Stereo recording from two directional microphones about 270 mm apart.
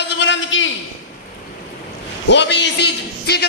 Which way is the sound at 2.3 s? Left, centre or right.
Left.